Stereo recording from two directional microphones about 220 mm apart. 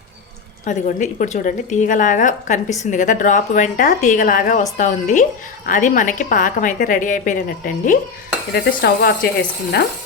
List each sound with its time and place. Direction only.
0.6 s a woman's voice: 35° left (ahead or behind)
8.5 s a woman's voice: 45° left (ahead or behind)